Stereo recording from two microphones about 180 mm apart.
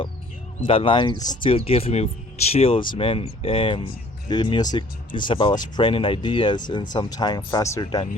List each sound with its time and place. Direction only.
0.7 s speech: 30° left (ahead or behind)